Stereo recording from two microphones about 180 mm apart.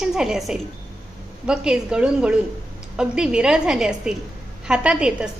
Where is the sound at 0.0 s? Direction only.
5° right (ahead or behind).